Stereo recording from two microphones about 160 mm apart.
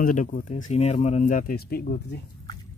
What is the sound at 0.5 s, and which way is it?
Speech, 40° left (ahead or behind).